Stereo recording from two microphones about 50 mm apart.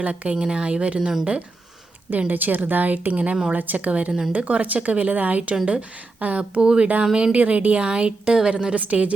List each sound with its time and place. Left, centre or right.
0.0 s speech: right
2.0 s speech: right; by 7.3 s centre
7.3 s speech: right